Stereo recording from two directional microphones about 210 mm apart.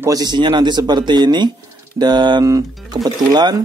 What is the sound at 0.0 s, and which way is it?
Speech, 15° right (ahead or behind).